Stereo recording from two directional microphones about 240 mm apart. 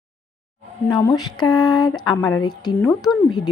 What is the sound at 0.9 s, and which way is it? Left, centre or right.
A woman's voice, centre.